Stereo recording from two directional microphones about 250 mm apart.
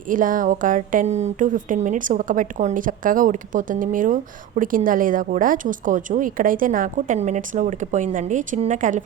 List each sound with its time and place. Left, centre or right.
0.1 s a woman's voice: right